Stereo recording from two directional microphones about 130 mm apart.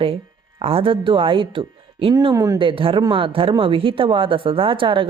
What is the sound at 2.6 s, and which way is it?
Speech, 40° right (ahead or behind).